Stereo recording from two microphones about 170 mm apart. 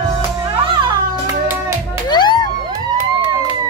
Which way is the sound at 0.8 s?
15° right (ahead or behind).